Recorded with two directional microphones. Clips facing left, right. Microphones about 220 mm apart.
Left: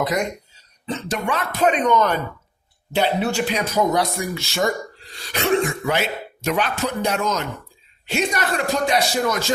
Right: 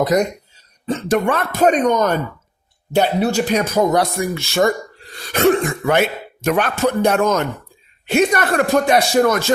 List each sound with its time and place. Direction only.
0.0 s speech: 40° right (ahead or behind)
0.9 s speech: 55° right (ahead or behind)